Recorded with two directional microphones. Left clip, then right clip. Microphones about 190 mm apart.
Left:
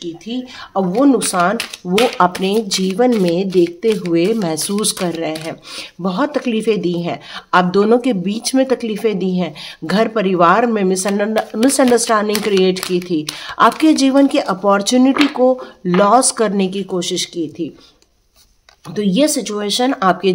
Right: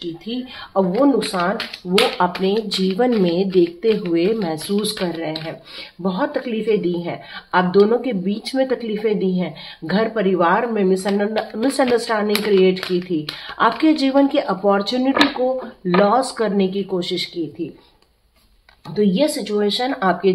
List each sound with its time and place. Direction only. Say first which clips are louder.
0.7 s speech: left 2 dB; 50° left (ahead or behind)
3.2 s speech: left 2 dB; 35° left (ahead or behind); by 17.3 s 55° left (ahead or behind)
18.9 s speech: left 2 dB; 80° left; by 20.2 s 65° left (ahead or behind)